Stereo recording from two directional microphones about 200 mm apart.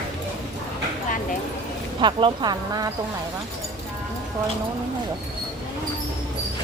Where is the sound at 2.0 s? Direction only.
20° right (ahead or behind).